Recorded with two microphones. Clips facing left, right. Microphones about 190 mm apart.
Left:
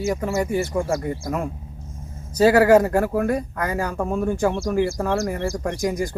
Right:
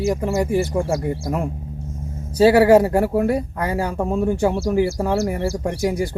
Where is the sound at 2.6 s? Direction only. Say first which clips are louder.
Right 2 dB; 30° right (ahead or behind).